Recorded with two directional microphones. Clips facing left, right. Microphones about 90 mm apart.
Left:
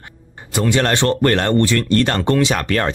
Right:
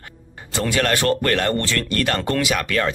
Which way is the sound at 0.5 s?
20° left (ahead or behind).